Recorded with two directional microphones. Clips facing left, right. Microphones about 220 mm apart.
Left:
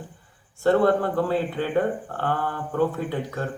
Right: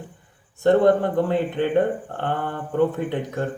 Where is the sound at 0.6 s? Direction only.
20° right (ahead or behind).